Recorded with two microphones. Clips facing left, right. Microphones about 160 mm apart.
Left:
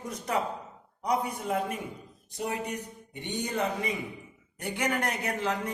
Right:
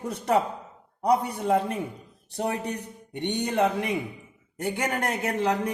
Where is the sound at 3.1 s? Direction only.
65° right (ahead or behind).